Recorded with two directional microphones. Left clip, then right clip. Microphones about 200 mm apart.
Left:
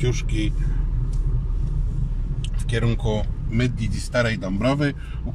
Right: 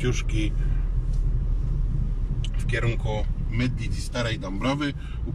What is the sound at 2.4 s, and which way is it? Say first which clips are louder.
Vehicle: left 2 dB; 25° left (ahead or behind).